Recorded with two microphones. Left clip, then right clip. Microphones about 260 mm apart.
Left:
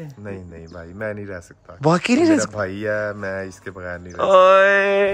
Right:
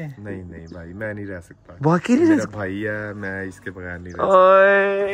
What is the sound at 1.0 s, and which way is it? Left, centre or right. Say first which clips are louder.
Speech: left 2 dB; left.